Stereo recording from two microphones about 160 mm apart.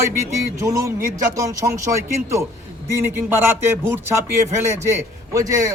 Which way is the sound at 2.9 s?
15° right (ahead or behind).